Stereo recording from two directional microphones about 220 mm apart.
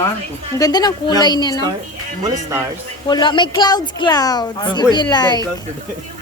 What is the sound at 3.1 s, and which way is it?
A woman's voice, 20° left (ahead or behind).